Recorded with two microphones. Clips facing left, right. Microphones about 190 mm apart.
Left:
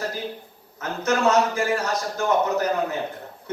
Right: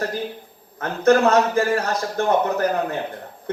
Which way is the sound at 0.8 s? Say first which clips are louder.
Right 7 dB; 55° right (ahead or behind).